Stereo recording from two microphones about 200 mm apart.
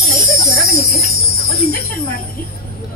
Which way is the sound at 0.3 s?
15° left (ahead or behind).